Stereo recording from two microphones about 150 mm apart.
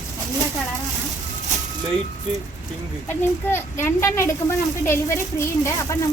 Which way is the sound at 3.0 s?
15° left (ahead or behind).